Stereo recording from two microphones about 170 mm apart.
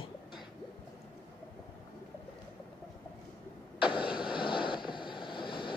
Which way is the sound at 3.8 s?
30° left (ahead or behind).